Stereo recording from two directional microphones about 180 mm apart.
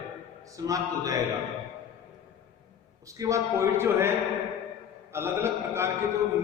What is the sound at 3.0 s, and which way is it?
A man's voice, 15° right (ahead or behind).